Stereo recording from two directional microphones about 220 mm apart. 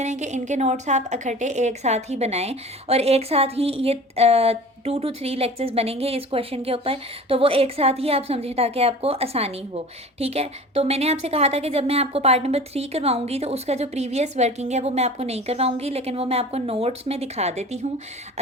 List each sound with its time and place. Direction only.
0.0 s a woman's voice: 30° right (ahead or behind)